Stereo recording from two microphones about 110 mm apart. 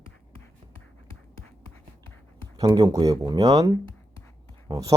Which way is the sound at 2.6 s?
35° right (ahead or behind).